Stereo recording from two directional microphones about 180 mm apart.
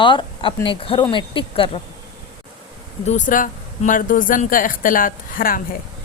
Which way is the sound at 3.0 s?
40° left (ahead or behind).